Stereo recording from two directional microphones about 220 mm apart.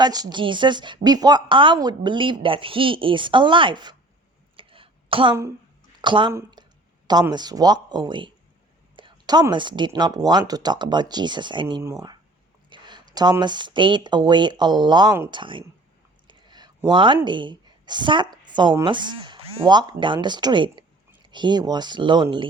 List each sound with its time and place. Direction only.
0.0 s a woman's voice: 20° right (ahead or behind)
4.5 s a sound: 25° right (ahead or behind)
6.0 s a woman's voice: 20° right (ahead or behind)